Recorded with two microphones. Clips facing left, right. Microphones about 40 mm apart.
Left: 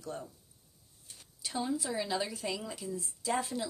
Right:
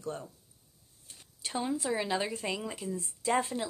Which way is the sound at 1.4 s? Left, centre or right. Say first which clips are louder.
Right 1 dB; right.